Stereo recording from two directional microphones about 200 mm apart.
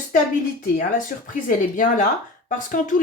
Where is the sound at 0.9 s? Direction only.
40° left (ahead or behind).